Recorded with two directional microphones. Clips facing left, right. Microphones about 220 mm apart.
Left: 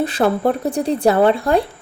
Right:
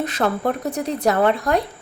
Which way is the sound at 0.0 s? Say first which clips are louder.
Left 5 dB; 30° left (ahead or behind).